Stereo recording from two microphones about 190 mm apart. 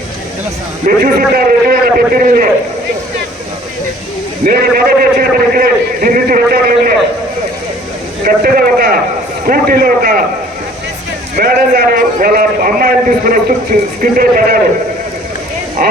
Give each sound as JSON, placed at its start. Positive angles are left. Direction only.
{"t": 0.9, "sound": "a man's voice", "side_deg": -50}
{"t": 4.4, "sound": "a man's voice", "side_deg": -55}
{"t": 8.2, "sound": "a man's voice", "side_deg": -50}
{"t": 11.3, "sound": "a man's voice", "side_deg": -50}
{"t": 15.8, "sound": "speech", "side_deg": -50}